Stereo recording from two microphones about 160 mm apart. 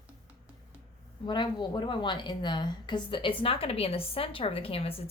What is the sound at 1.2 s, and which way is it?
A woman's voice, 30° left (ahead or behind).